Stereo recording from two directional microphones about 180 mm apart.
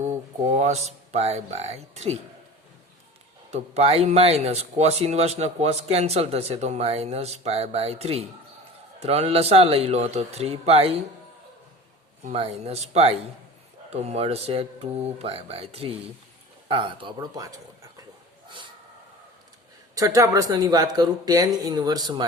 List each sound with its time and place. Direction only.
0.4 s speech: 40° right (ahead or behind)
3.5 s speech: 35° right (ahead or behind)
12.2 s speech: 35° right (ahead or behind)
20.0 s speech: 20° right (ahead or behind)